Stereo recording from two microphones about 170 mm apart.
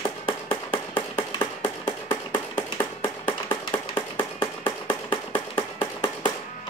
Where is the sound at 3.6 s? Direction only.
25° left (ahead or behind).